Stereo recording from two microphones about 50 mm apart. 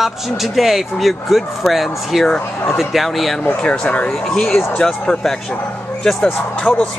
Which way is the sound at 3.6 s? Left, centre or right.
Left.